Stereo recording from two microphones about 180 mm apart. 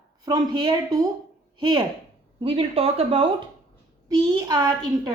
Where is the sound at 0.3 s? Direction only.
20° right (ahead or behind).